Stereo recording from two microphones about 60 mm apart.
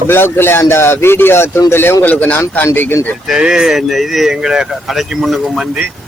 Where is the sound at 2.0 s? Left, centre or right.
Left.